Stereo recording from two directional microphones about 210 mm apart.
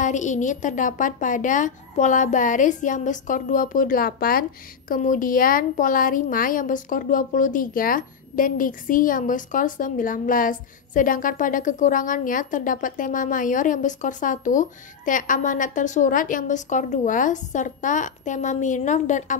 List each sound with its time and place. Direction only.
0.0 s a woman's voice: 35° left (ahead or behind)